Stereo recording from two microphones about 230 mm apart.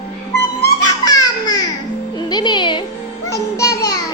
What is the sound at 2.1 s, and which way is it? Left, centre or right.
Music, centre.